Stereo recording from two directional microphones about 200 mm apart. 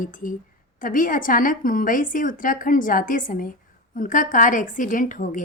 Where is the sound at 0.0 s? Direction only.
45° left (ahead or behind).